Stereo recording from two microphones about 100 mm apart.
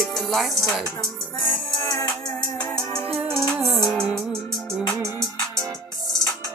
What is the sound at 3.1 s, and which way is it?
Music, 70° right (ahead or behind).